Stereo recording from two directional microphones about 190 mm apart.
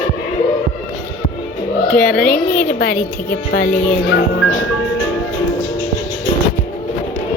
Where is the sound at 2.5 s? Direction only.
50° left (ahead or behind).